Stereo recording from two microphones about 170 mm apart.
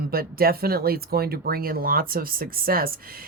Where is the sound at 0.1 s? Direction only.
60° right (ahead or behind).